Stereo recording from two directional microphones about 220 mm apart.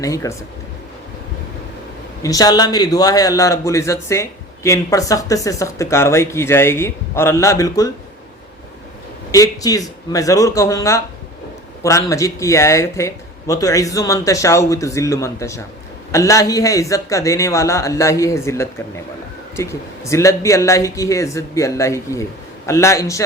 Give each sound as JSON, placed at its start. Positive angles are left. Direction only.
{"t": 0.0, "sound": "a man's voice", "side_deg": 15}
{"t": 2.2, "sound": "a man's voice", "side_deg": 15}
{"t": 9.3, "sound": "a man's voice", "side_deg": 15}